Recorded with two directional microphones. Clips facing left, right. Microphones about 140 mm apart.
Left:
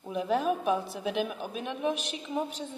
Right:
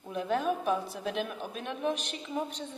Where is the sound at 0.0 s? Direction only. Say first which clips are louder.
Left 2 dB; centre (ahead or behind).